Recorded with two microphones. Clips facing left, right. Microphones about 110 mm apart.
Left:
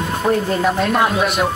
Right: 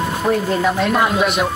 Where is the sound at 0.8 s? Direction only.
Centre (ahead or behind).